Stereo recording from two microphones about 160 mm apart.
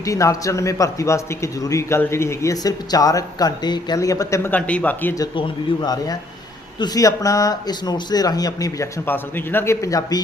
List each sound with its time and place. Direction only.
0.0 s a man's voice: 20° left (ahead or behind)
5.4 s a man's voice: 25° left (ahead or behind)